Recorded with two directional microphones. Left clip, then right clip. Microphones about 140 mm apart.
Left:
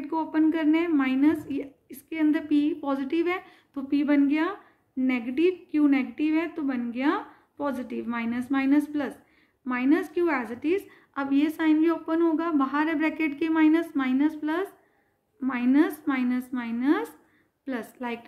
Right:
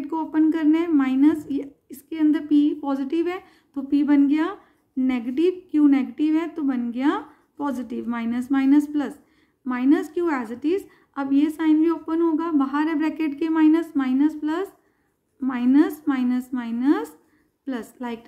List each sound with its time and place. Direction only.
0.0 s a woman's voice: 65° right (ahead or behind); by 11.0 s 45° right (ahead or behind)
11.1 s a woman's voice: 30° right (ahead or behind); by 18.2 s 50° right (ahead or behind)